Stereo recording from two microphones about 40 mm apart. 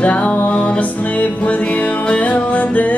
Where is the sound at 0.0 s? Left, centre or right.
Left.